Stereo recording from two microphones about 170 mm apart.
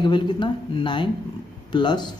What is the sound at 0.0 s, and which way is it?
Speech, 25° left (ahead or behind).